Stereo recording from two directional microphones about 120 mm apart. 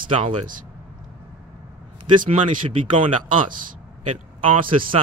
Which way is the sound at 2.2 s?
45° right (ahead or behind).